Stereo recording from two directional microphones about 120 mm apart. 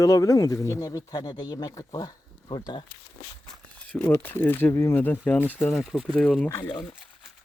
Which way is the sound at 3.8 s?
10° left (ahead or behind).